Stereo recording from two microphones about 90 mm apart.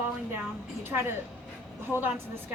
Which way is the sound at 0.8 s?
25° right (ahead or behind).